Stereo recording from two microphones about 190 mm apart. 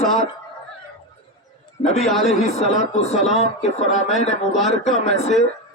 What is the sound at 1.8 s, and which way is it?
A man's voice, 25° left (ahead or behind).